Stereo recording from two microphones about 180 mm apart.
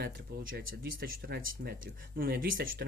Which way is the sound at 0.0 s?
55° right (ahead or behind).